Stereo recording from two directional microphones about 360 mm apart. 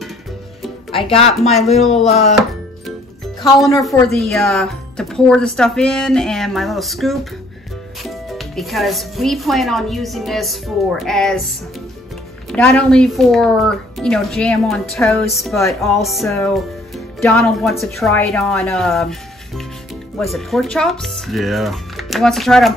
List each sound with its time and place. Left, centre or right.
0.9 s speech: centre
1.8 s speech: centre
2.0 s speech: centre
3.5 s speech: centre
12.4 s speech: centre